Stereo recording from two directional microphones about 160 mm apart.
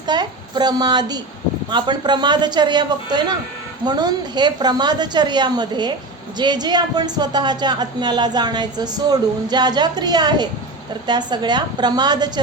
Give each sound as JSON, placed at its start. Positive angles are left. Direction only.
{"t": 0.1, "sound": "a child's voice", "side_deg": -25}